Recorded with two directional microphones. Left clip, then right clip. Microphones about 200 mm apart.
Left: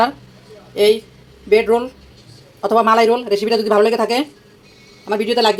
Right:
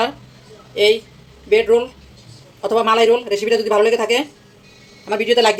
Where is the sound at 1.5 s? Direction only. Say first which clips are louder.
Even; 25° left (ahead or behind).